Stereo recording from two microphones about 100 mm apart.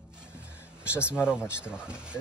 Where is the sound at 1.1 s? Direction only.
10° right (ahead or behind).